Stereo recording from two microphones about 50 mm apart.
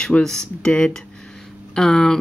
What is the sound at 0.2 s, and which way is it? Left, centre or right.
Speech, centre.